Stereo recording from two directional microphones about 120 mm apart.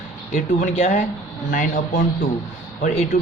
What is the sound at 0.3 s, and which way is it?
Speech, 90° left.